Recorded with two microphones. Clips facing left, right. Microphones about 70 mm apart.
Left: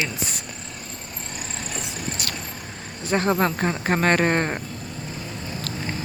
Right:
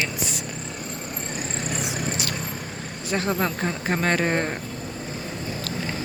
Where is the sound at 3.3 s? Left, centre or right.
Left.